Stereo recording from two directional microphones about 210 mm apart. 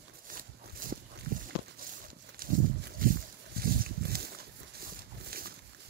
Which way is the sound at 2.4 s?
40° right (ahead or behind).